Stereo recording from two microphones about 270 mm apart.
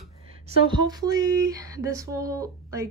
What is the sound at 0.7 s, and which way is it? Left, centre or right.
Speech, centre.